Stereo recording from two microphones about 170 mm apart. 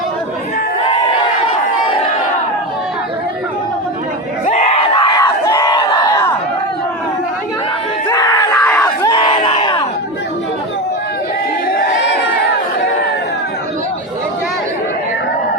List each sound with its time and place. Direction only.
4.4 s crowd: 40° left (ahead or behind); by 6.3 s 20° left (ahead or behind)
8.1 s screaming: 20° left (ahead or behind)
8.8 s crowd: 20° left (ahead or behind)
11.7 s crowd: 90° left